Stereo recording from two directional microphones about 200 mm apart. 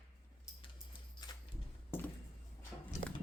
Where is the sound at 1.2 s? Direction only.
20° left (ahead or behind).